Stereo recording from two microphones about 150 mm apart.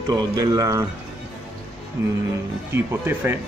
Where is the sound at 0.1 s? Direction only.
25° right (ahead or behind).